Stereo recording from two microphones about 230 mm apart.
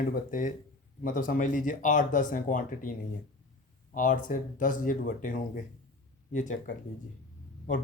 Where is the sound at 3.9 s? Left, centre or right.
Left.